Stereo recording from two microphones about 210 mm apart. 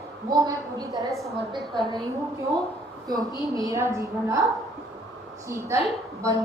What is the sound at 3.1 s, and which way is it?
A woman's voice, 15° right (ahead or behind).